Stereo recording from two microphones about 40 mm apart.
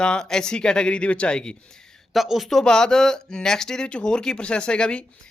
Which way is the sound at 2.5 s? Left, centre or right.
Centre.